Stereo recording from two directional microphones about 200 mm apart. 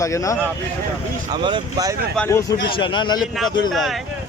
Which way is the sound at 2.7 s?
25° left (ahead or behind).